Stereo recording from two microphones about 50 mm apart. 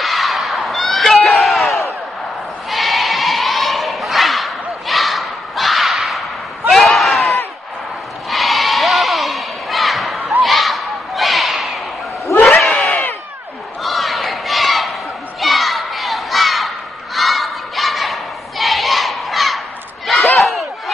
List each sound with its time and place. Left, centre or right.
0.0 s a sound: centre
2.7 s bleat: centre
6.7 s a sound: centre
12.6 s crowd: centre
13.8 s battle cry: centre
15.4 s crowd: centre
20.1 s battle cry: centre